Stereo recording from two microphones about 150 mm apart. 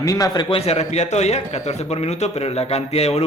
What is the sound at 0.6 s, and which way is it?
A man's voice, 45° left (ahead or behind).